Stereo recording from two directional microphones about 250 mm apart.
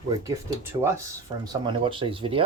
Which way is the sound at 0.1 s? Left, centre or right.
Centre.